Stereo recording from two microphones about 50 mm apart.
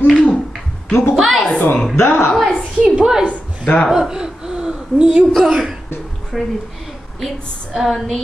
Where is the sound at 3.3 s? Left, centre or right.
Left.